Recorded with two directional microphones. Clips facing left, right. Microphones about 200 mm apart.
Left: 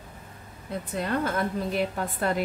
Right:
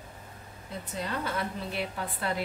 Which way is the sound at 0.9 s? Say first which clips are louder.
Left 6 dB; 55° left (ahead or behind).